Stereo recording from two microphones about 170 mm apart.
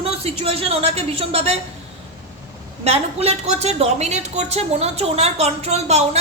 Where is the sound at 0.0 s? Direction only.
35° right (ahead or behind).